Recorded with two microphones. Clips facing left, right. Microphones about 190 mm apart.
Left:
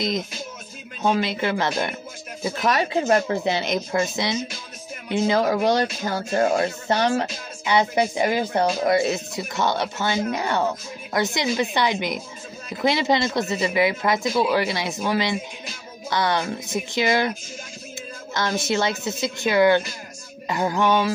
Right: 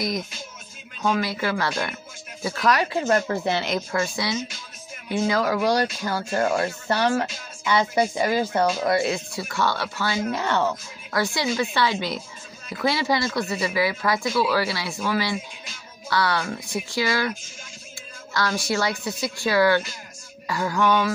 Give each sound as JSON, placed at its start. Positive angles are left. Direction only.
{"t": 1.0, "sound": "speech", "side_deg": 25}
{"t": 18.3, "sound": "speech", "side_deg": 20}